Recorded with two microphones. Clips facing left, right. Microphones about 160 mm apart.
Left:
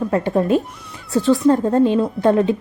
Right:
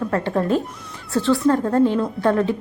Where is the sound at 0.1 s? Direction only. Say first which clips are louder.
Left 4 dB; 15° left (ahead or behind).